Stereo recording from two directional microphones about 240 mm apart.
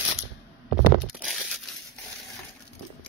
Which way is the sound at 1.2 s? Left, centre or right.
Centre.